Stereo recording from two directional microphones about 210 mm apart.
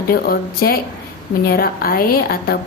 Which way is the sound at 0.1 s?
45° left (ahead or behind).